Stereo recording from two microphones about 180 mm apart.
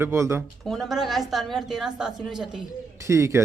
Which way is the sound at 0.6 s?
Centre (ahead or behind).